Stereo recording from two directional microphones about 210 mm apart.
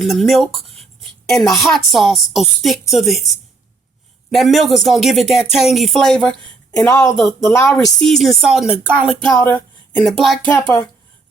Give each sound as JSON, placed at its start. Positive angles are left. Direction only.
{"t": 0.0, "sound": "speech", "side_deg": 0}
{"t": 4.3, "sound": "speech", "side_deg": 0}
{"t": 6.7, "sound": "a woman's voice", "side_deg": 15}
{"t": 8.0, "sound": "speech", "side_deg": 0}
{"t": 9.3, "sound": "a woman's voice", "side_deg": 15}
{"t": 10.0, "sound": "speech", "side_deg": 0}
{"t": 10.5, "sound": "a woman's voice", "side_deg": 15}